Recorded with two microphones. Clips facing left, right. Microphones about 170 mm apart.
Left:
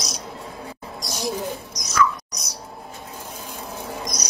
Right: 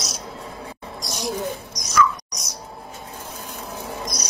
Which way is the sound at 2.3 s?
Centre (ahead or behind).